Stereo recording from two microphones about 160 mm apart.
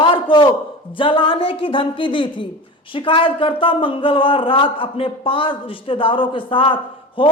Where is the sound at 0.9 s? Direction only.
35° left (ahead or behind).